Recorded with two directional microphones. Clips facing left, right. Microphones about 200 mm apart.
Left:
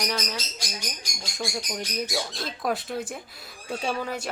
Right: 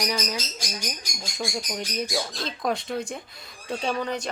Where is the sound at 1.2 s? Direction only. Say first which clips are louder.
Right 1 dB; centre (ahead or behind).